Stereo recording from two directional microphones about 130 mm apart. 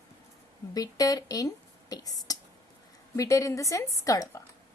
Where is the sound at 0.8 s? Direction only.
30° left (ahead or behind).